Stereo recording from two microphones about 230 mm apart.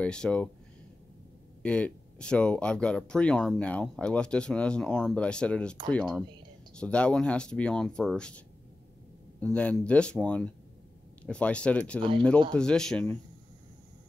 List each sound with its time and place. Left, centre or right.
0.0 s speech: centre
1.6 s speech: centre
9.4 s speech: centre